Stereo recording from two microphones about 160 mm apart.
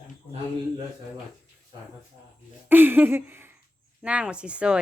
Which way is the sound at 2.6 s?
15° right (ahead or behind).